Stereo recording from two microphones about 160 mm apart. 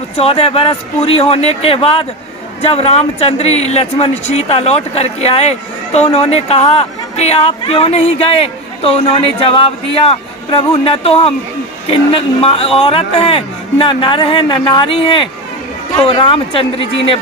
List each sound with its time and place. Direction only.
0.2 s speech: 35° left (ahead or behind)